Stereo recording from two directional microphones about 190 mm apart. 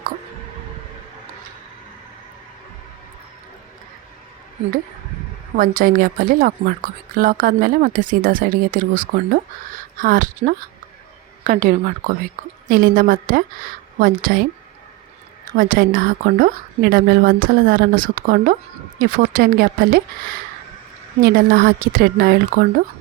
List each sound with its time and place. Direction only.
5.5 s a woman's voice: 45° right (ahead or behind)
15.5 s a woman's voice: 45° right (ahead or behind)
21.2 s a woman's voice: 50° right (ahead or behind)